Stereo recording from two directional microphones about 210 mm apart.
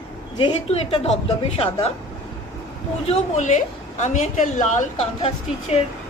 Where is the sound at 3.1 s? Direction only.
35° left (ahead or behind).